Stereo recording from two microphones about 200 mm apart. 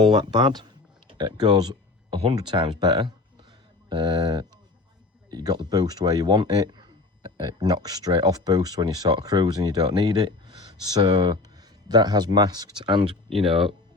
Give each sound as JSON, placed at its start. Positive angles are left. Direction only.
{"t": 0.0, "sound": "speech", "side_deg": -20}